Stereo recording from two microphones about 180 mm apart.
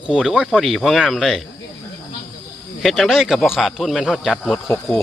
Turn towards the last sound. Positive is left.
turn(degrees=10)  # may be behind; listen again after turning